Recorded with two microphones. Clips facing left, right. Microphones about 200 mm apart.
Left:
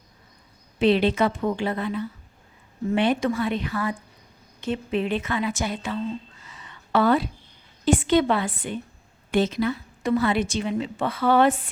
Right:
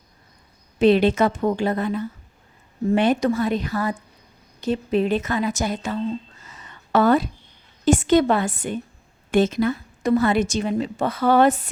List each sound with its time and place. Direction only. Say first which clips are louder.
0.8 s a woman's voice: right 3 dB; 45° right (ahead or behind)
6.4 s a sound: right 1 dB; 45° right (ahead or behind)
7.9 s a woman's voice: right 3 dB; 45° right (ahead or behind)